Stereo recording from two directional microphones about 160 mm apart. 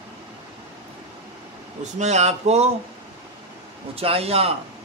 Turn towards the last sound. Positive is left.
turn(degrees=-40)  # may be behind; listen again after turning